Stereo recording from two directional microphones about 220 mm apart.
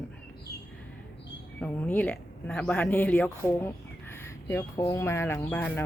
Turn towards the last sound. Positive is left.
turn(degrees=5)  # may be behind; listen again after turning